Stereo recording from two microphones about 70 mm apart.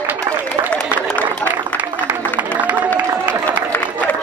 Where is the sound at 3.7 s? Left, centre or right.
Left.